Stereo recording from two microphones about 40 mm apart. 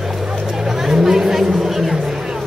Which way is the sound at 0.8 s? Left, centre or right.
Centre.